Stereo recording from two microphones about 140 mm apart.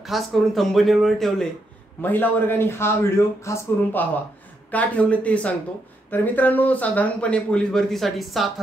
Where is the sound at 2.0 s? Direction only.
15° left (ahead or behind).